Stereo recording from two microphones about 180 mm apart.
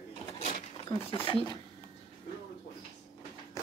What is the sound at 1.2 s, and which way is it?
Speech, 25° left (ahead or behind).